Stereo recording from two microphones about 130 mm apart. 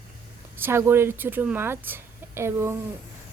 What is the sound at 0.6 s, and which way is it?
A woman's voice, 20° right (ahead or behind).